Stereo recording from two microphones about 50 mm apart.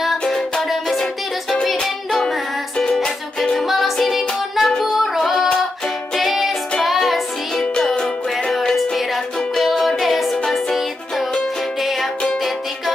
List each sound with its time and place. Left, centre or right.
0.6 s music: centre
3.6 s music: centre